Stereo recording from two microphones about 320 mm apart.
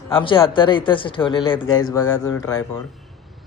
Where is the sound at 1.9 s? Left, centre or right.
Centre.